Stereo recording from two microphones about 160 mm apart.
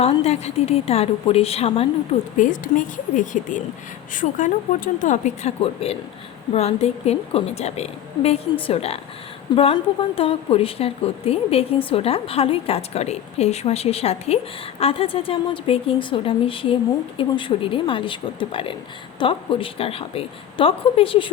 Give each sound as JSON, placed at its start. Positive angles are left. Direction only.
{"t": 0.0, "sound": "a woman's voice", "side_deg": 40}
{"t": 2.4, "sound": "a woman's voice", "side_deg": 55}